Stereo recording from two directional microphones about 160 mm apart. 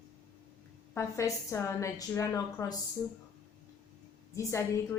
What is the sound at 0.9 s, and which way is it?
A woman's voice, 20° left (ahead or behind).